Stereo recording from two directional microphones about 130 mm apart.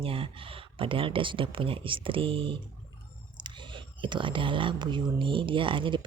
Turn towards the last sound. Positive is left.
turn(degrees=-40)  # may be behind; listen again after turning